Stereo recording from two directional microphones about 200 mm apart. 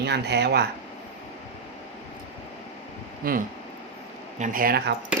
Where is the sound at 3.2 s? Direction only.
45° right (ahead or behind).